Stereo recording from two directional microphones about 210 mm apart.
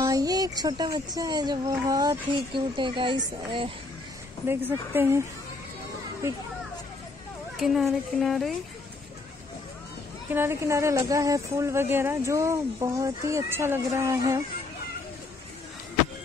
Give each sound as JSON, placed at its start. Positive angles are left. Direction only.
{"t": 0.0, "sound": "speech", "side_deg": -15}
{"t": 4.5, "sound": "speech", "side_deg": -10}
{"t": 7.5, "sound": "speech", "side_deg": 0}
{"t": 10.3, "sound": "speech", "side_deg": -10}